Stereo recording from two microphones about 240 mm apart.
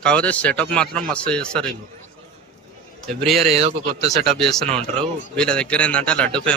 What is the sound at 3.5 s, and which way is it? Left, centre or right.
Speech, right.